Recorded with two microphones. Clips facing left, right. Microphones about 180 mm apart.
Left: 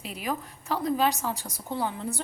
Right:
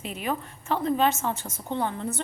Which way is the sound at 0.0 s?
5° left (ahead or behind).